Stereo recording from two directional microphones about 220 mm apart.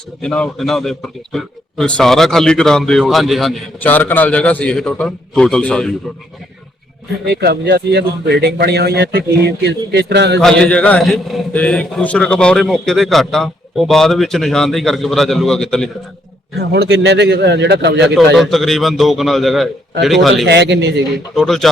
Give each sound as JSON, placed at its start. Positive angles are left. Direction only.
{"t": 0.2, "sound": "a man's voice", "side_deg": 5}
{"t": 7.3, "sound": "a man's voice", "side_deg": -45}
{"t": 10.4, "sound": "a man's voice", "side_deg": 5}
{"t": 16.6, "sound": "a man's voice", "side_deg": -50}
{"t": 18.3, "sound": "a man's voice", "side_deg": 0}
{"t": 20.5, "sound": "a man's voice", "side_deg": -50}
{"t": 21.3, "sound": "a man's voice", "side_deg": 0}